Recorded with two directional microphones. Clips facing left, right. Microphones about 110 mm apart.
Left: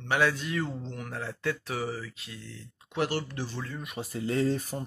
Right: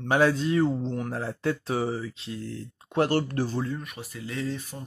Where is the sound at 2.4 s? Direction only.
40° right (ahead or behind).